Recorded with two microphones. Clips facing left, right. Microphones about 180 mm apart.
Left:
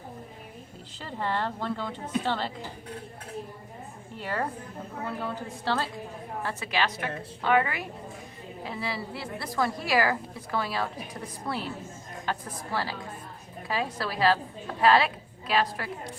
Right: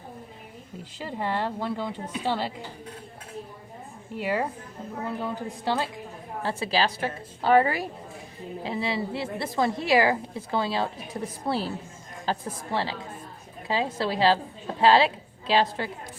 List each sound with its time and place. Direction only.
0.9 s a woman's voice: 10° right (ahead or behind)
4.2 s a woman's voice: 10° right (ahead or behind)
6.4 s a woman's voice: 30° right (ahead or behind)
8.6 s a woman's voice: 25° right (ahead or behind)